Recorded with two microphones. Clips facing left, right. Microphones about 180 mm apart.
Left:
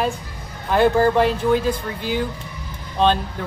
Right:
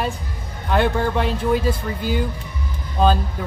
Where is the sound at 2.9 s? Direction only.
5° right (ahead or behind).